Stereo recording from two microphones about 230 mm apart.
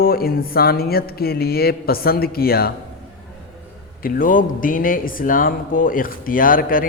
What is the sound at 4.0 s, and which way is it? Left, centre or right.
Speech, left.